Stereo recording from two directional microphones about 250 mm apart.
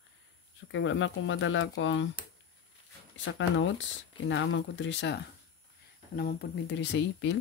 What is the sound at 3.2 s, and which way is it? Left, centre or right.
Speech, left.